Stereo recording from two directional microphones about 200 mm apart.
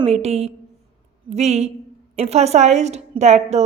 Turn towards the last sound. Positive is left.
turn(degrees=-35)  # may be behind; listen again after turning